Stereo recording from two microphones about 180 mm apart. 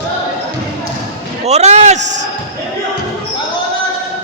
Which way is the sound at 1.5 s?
40° right (ahead or behind).